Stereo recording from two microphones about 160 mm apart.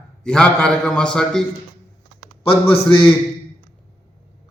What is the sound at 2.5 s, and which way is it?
Speech, 35° left (ahead or behind).